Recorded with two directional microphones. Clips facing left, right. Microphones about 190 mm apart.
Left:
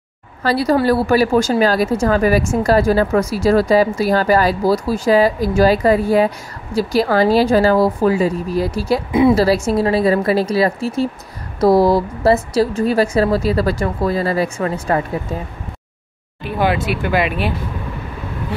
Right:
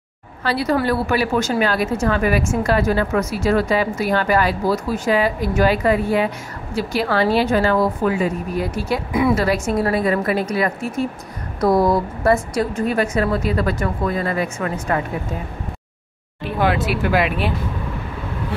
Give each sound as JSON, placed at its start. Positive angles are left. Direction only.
{"t": 0.4, "sound": "speech", "side_deg": 40}
{"t": 16.5, "sound": "speech", "side_deg": 0}